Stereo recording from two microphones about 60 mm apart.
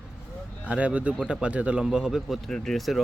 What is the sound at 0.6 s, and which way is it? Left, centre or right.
A man's voice, right.